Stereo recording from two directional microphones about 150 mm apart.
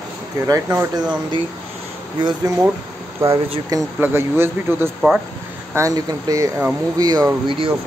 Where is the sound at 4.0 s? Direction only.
15° right (ahead or behind).